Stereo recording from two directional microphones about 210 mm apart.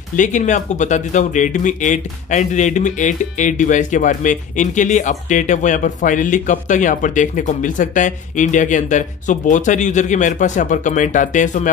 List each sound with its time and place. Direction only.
0.1 s speech: 35° left (ahead or behind)